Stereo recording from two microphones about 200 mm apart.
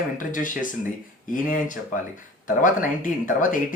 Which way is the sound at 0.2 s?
40° left (ahead or behind).